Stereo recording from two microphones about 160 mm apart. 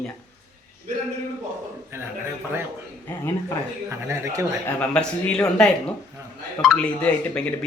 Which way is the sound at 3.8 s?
15° right (ahead or behind).